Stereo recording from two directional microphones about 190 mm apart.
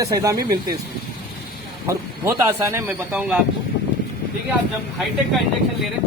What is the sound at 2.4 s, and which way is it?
Speech, 15° right (ahead or behind).